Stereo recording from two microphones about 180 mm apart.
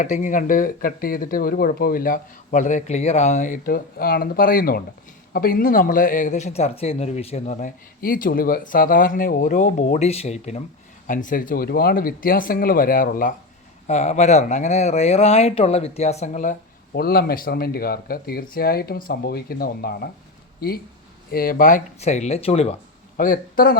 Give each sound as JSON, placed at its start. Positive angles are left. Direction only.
{"t": 0.0, "sound": "a man's voice", "side_deg": 45}
{"t": 13.8, "sound": "speech", "side_deg": 40}
{"t": 16.9, "sound": "speech", "side_deg": 60}
{"t": 23.1, "sound": "a man's voice", "side_deg": 50}